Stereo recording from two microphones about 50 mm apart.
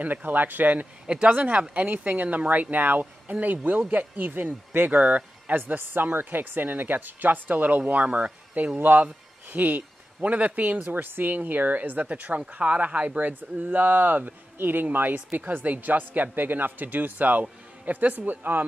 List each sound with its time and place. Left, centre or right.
0.0 s a man's voice: right
1.0 s a man's voice: right
8.7 s a man's voice: right